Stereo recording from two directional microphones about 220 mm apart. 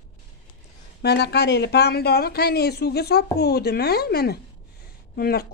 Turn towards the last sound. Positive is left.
turn(degrees=45)  # may be behind; listen again after turning